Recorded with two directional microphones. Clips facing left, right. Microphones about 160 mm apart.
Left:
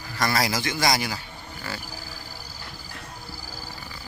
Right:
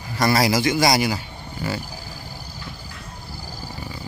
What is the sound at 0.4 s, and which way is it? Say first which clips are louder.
Speech: right 7 dB; 15° right (ahead or behind).